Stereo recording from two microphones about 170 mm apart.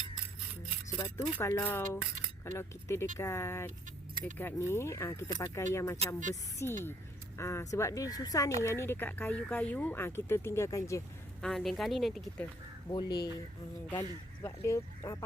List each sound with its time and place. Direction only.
0.9 s speech: 20° left (ahead or behind)
11.4 s speech: centre (ahead or behind)
12.9 s speech: 25° left (ahead or behind)
14.4 s speech: 15° left (ahead or behind)